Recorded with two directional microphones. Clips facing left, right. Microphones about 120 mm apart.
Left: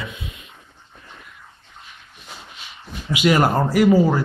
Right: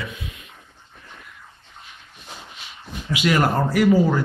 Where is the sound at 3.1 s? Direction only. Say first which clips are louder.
Left 3 dB; 15° left (ahead or behind).